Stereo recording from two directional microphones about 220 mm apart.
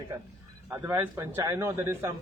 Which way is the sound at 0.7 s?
10° right (ahead or behind).